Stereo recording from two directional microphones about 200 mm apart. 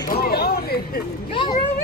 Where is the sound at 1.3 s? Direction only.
25° left (ahead or behind).